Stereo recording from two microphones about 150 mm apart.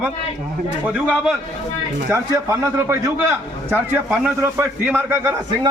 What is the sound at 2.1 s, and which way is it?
A man's voice, 20° right (ahead or behind).